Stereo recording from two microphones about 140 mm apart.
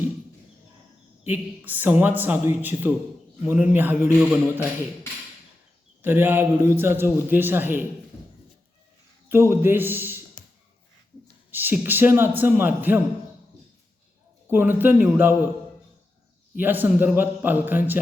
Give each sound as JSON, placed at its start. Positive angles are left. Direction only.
{"t": 1.2, "sound": "a man's voice", "side_deg": -15}
{"t": 6.0, "sound": "a man's voice", "side_deg": -15}
{"t": 9.3, "sound": "a man's voice", "side_deg": -15}
{"t": 11.5, "sound": "a man's voice", "side_deg": -15}
{"t": 14.4, "sound": "a man's voice", "side_deg": -15}
{"t": 16.6, "sound": "a man's voice", "side_deg": -15}